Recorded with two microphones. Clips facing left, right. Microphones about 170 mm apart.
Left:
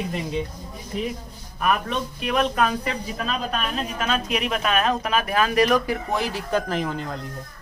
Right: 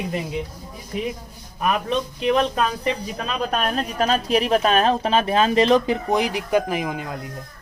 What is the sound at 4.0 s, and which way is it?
A woman's voice, 35° right (ahead or behind).